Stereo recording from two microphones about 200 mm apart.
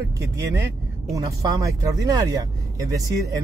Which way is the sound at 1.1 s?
15° right (ahead or behind).